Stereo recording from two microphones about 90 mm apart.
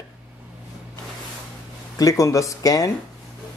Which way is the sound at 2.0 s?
35° left (ahead or behind).